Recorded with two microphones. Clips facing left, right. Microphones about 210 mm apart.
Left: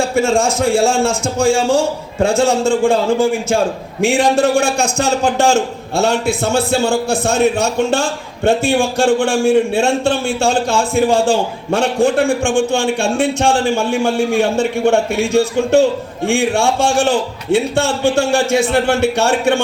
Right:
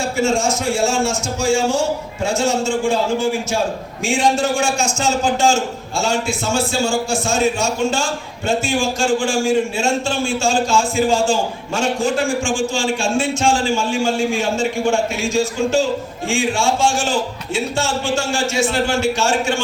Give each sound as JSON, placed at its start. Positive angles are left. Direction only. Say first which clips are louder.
{"t": 0.2, "sound": "a man's voice", "louder": "left 3 dB", "side_deg": 55}